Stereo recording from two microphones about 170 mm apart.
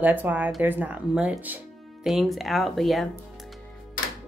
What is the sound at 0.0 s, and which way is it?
Speech, 10° right (ahead or behind).